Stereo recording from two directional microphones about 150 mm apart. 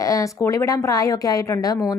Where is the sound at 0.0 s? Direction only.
20° left (ahead or behind).